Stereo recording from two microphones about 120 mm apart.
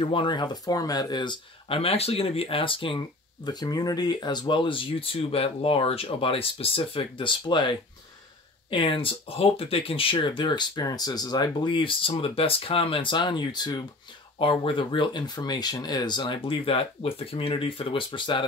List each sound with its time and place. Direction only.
0.0 s speech: 45° left (ahead or behind)
3.4 s speech: 35° left (ahead or behind)
16.4 s speech: 50° left (ahead or behind)